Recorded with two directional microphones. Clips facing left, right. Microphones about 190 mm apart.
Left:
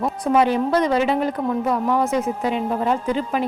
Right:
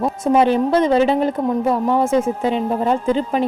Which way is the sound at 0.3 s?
25° right (ahead or behind).